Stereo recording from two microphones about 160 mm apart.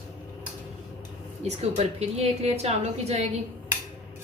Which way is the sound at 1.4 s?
40° right (ahead or behind).